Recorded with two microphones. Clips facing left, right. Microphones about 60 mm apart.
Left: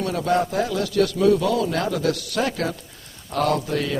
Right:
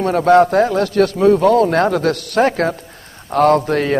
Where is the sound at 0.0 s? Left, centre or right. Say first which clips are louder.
Right 10 dB; right.